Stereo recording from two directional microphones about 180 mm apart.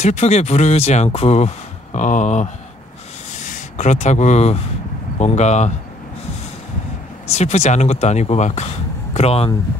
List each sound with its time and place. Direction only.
0.0 s speech: 40° left (ahead or behind)
7.2 s speech: 35° left (ahead or behind)